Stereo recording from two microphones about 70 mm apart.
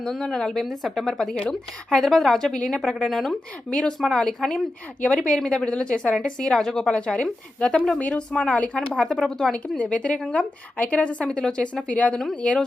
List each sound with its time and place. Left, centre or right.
0.0 s speech: centre
3.7 s a woman's voice: centre
9.5 s a woman's voice: centre